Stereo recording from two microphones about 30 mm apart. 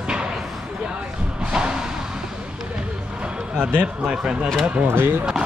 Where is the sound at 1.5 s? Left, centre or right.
Right.